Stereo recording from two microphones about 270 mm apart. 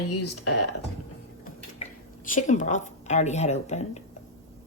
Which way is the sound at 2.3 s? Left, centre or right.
Left.